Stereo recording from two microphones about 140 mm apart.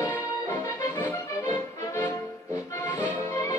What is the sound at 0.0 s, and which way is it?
Music, 15° left (ahead or behind).